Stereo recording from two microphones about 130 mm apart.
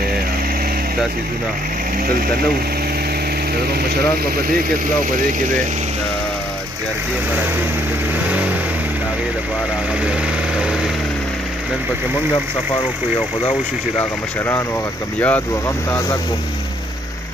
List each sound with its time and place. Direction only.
8.3 s vehicle: 10° right (ahead or behind)
13.9 s speech: 20° left (ahead or behind)